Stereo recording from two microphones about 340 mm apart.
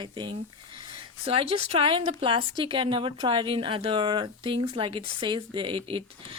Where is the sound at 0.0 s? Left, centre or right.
Centre.